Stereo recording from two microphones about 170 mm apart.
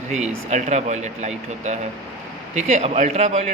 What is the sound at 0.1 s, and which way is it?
Speech, 40° right (ahead or behind).